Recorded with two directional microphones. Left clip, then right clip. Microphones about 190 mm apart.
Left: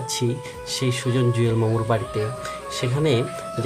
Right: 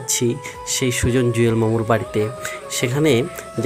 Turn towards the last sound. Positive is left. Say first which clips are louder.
# right 4 dB
turn(degrees=-30)  # may be behind; listen again after turning